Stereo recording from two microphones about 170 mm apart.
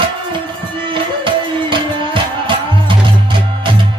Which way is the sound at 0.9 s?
30° right (ahead or behind).